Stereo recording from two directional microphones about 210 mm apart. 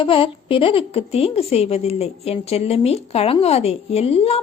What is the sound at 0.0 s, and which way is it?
A woman's voice, 25° left (ahead or behind).